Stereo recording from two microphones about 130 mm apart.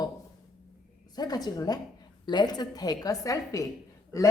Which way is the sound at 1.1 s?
30° left (ahead or behind).